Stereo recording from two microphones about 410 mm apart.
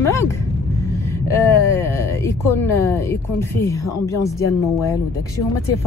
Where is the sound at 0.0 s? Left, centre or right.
Centre.